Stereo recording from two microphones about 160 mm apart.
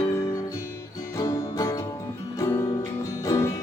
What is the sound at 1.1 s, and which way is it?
Music, 20° left (ahead or behind).